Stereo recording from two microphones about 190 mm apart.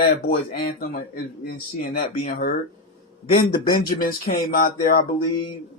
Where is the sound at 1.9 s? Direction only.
45° left (ahead or behind).